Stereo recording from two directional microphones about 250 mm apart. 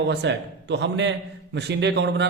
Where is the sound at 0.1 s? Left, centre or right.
Right.